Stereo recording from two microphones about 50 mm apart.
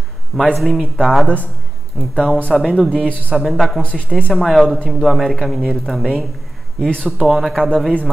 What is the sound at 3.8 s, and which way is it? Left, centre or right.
Speech, left.